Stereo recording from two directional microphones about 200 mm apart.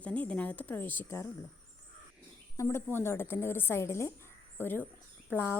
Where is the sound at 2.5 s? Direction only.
15° left (ahead or behind).